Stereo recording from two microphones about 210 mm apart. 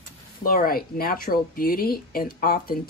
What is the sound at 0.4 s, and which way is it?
Speech, 45° left (ahead or behind).